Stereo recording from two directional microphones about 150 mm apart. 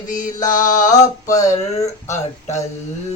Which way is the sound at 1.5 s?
50° left (ahead or behind).